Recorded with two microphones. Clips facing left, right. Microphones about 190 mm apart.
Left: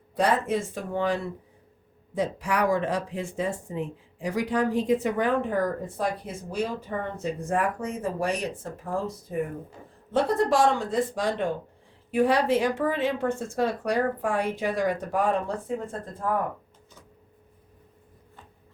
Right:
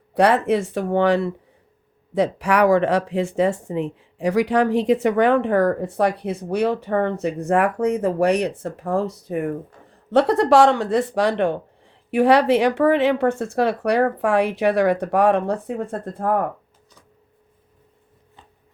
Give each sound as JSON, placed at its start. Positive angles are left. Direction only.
{"t": 0.1, "sound": "speech", "side_deg": -70}